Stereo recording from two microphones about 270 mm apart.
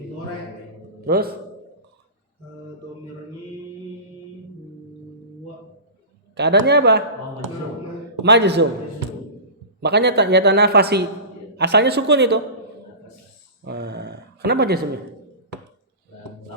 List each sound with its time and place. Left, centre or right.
1.0 s speech: right
6.3 s speech: right
8.2 s speech: right
9.8 s speech: right
13.7 s a sound: right